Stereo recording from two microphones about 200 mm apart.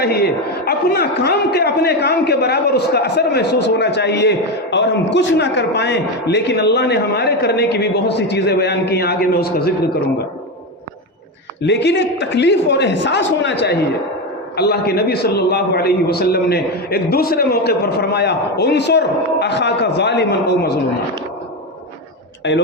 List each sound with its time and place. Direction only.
0.0 s a man's voice: 55° left (ahead or behind)
11.6 s a man's voice: 60° left (ahead or behind)
22.4 s a man's voice: 60° left (ahead or behind)